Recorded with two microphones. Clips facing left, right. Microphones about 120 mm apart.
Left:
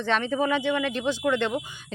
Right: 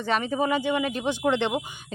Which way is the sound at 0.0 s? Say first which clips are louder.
Even; 10° right (ahead or behind).